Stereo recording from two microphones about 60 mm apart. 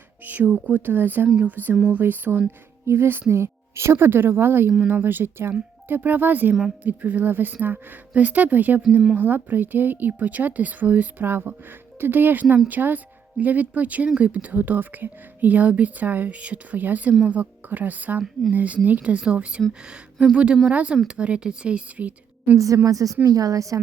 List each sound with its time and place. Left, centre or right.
0.3 s speech: right
2.8 s speech: right
22.5 s a woman's voice: right